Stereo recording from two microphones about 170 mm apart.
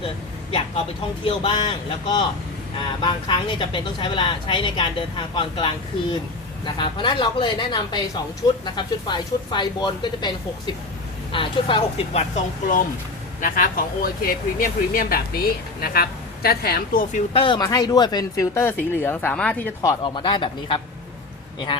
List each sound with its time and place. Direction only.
1.2 s speech: 30° left (ahead or behind)
13.4 s speech: 55° left (ahead or behind)
17.3 s speech: 30° left (ahead or behind)